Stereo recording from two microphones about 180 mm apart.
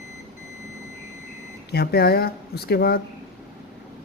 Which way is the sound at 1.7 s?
60° left (ahead or behind).